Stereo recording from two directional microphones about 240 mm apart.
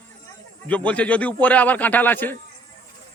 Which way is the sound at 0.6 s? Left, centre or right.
Centre.